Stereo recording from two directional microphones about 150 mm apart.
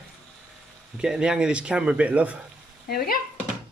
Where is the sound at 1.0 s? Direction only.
5° right (ahead or behind).